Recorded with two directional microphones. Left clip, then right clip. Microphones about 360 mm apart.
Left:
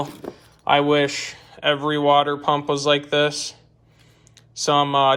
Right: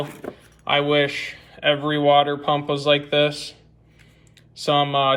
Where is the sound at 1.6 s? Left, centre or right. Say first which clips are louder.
Even; centre.